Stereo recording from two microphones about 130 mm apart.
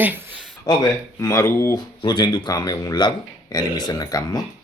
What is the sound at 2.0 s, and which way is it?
Speech, 35° left (ahead or behind).